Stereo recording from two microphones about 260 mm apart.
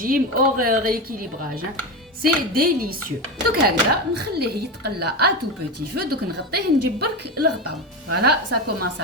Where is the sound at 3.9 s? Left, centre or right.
Right.